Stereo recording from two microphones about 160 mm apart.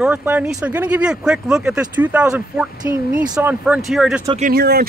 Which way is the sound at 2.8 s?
25° right (ahead or behind).